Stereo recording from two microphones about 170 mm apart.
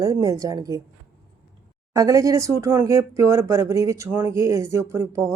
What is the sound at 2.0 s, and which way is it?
Speech, 20° right (ahead or behind).